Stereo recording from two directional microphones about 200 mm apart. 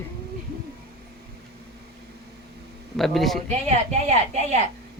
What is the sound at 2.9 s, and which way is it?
Speech, centre (ahead or behind).